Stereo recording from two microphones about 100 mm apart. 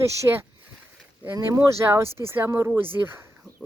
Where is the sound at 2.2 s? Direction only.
25° right (ahead or behind).